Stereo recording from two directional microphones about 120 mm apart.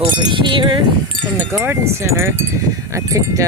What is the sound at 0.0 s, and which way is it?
Speech, 40° right (ahead or behind).